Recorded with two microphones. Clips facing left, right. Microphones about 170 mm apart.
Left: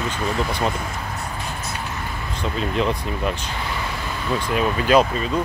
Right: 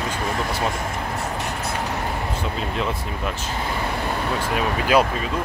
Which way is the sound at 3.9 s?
55° right (ahead or behind).